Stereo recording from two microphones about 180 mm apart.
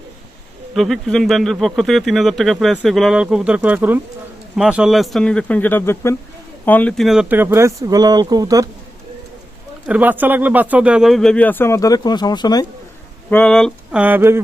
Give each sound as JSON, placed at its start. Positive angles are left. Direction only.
{"t": 0.7, "sound": "speech", "side_deg": 0}
{"t": 9.8, "sound": "speech", "side_deg": -10}
{"t": 13.3, "sound": "speech", "side_deg": 5}
{"t": 14.0, "sound": "speech", "side_deg": -10}